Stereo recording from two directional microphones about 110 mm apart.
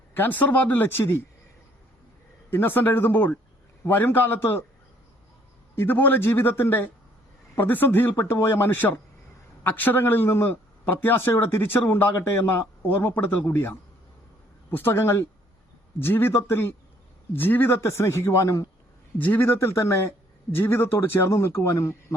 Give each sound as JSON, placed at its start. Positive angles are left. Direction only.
{"t": 0.1, "sound": "speech", "side_deg": 15}
{"t": 2.5, "sound": "a man's voice", "side_deg": 20}
{"t": 5.7, "sound": "a man's voice", "side_deg": 20}